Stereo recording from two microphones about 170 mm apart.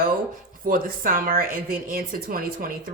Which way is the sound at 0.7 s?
55° right (ahead or behind).